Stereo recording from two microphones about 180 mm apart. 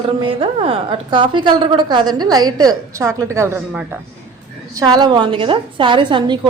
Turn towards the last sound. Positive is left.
turn(degrees=-25)  # may be behind; listen again after turning